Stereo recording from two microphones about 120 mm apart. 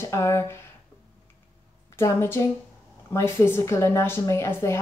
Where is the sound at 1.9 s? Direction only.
20° left (ahead or behind).